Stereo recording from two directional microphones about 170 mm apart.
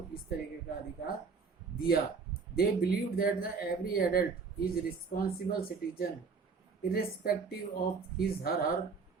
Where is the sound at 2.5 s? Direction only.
65° left (ahead or behind).